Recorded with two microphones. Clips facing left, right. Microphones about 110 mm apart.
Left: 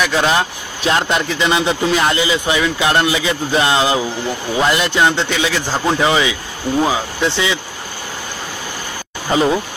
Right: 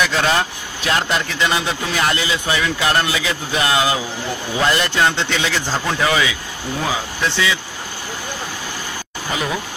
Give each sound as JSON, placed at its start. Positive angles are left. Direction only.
{"t": 0.0, "sound": "a man's voice", "side_deg": 20}
{"t": 9.3, "sound": "speech", "side_deg": 30}